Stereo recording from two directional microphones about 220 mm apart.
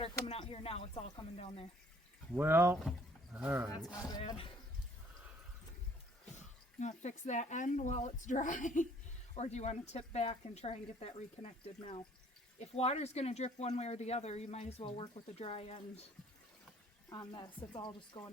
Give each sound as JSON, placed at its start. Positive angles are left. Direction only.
{"t": 0.3, "sound": "speech", "side_deg": 25}
{"t": 2.3, "sound": "speech", "side_deg": -10}
{"t": 4.1, "sound": "speech", "side_deg": 25}
{"t": 6.3, "sound": "speech", "side_deg": 35}
{"t": 17.1, "sound": "speech", "side_deg": 20}